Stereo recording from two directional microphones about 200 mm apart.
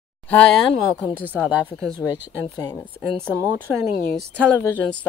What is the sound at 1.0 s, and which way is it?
Speech, 10° right (ahead or behind).